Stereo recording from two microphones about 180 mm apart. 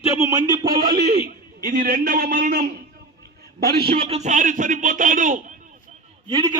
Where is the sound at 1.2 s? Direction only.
60° right (ahead or behind).